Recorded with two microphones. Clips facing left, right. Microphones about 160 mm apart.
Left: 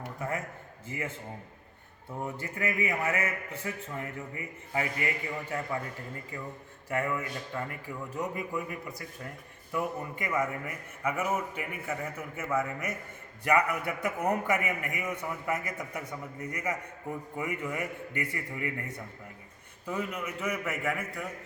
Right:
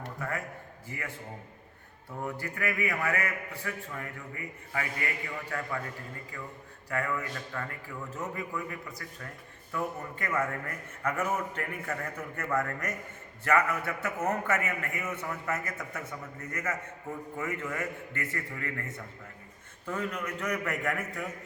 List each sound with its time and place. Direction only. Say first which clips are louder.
0.2 s a sound: left 2 dB; 20° left (ahead or behind)
0.9 s a man's voice: left 4 dB; 20° left (ahead or behind)
2.2 s a man's voice: even; 20° left (ahead or behind)
6.9 s a man's voice: left 1 dB; 20° left (ahead or behind); by 21.2 s centre (ahead or behind)